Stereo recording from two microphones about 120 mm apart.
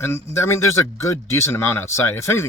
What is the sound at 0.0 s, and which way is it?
A man's voice, 25° left (ahead or behind).